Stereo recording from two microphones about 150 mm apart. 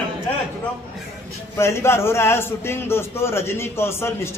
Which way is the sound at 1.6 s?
15° left (ahead or behind).